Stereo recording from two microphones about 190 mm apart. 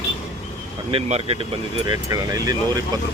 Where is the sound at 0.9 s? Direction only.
30° right (ahead or behind).